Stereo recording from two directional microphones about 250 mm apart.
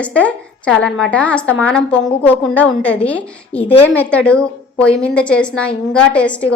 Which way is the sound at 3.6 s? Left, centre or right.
Left.